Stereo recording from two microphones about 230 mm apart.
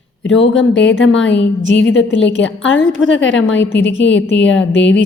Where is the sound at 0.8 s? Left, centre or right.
Left.